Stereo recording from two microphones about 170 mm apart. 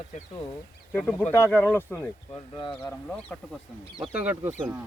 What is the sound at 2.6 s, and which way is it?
Speech, 30° left (ahead or behind).